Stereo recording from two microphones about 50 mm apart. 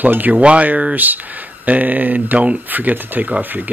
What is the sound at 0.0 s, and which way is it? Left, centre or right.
Speech, right.